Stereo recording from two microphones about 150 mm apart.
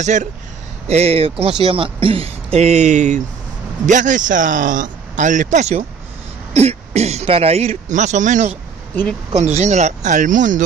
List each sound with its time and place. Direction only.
0.0 s speech: 50° right (ahead or behind)